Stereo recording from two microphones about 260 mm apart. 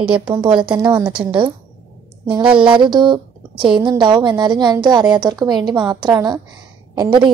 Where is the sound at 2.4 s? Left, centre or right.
Centre.